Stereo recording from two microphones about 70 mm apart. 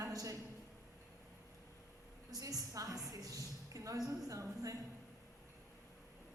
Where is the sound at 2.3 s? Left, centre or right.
Right.